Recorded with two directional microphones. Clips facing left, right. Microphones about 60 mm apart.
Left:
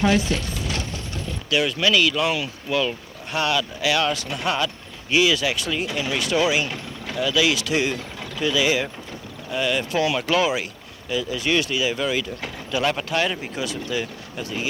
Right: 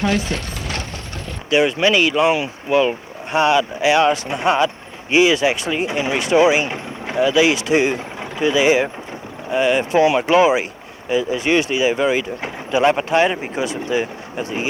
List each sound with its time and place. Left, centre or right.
1.5 s speech: right